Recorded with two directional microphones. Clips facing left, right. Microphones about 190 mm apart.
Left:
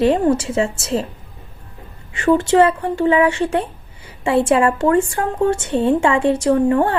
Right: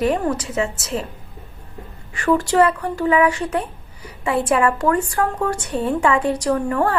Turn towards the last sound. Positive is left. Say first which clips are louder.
# left 4 dB
turn(degrees=25)  # may be behind; listen again after turning